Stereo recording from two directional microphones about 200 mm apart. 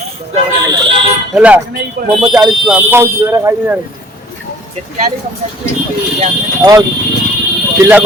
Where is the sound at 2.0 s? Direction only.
50° right (ahead or behind).